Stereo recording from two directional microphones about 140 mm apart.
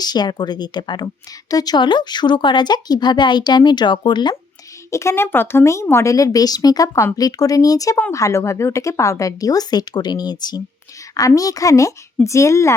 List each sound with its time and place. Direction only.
0.0 s a woman's voice: 30° left (ahead or behind)
4.9 s a woman's voice: 20° left (ahead or behind)